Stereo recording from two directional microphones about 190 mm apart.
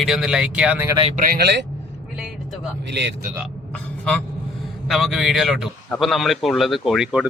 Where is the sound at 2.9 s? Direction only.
65° right (ahead or behind).